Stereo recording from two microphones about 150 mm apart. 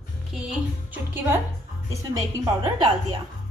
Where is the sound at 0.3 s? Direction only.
5° right (ahead or behind); by 3.2 s 25° right (ahead or behind).